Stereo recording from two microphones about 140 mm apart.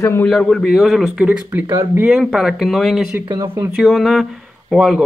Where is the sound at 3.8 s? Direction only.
Centre (ahead or behind).